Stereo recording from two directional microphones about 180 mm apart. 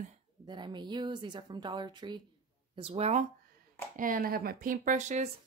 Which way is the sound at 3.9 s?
50° right (ahead or behind).